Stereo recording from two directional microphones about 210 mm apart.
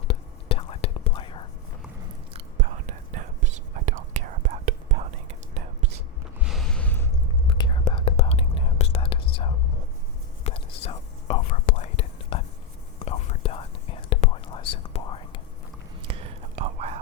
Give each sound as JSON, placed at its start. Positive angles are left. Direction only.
{"t": 0.1, "sound": "whispering", "side_deg": 25}
{"t": 2.3, "sound": "whispering", "side_deg": -35}
{"t": 6.4, "sound": "a sound", "side_deg": 0}
{"t": 7.4, "sound": "whispering", "side_deg": 25}
{"t": 16.0, "sound": "whispering", "side_deg": -25}